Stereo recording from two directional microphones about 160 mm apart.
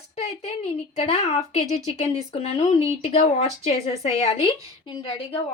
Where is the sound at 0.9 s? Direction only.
40° left (ahead or behind).